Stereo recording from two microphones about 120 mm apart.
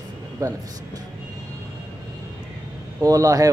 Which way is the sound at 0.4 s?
30° right (ahead or behind).